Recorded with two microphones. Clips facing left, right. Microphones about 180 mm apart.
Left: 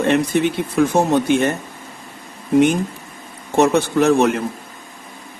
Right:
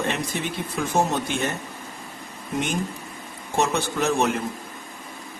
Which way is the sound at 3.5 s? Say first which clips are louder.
Left 9 dB; 60° left (ahead or behind).